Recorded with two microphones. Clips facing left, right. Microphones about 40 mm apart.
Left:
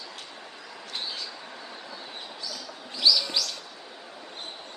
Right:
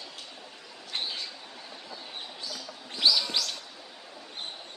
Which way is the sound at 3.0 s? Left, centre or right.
Right.